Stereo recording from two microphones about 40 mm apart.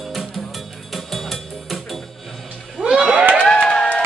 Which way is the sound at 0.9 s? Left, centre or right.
Centre.